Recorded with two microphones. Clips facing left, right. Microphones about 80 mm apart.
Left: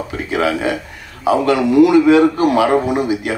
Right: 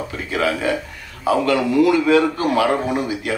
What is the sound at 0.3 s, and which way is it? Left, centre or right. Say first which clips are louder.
A man's voice: left 3 dB; left.